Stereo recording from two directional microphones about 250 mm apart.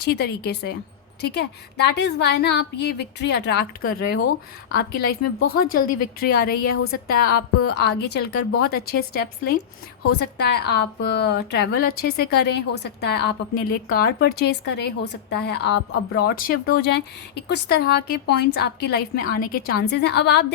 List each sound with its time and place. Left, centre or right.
0.0 s a woman's voice: left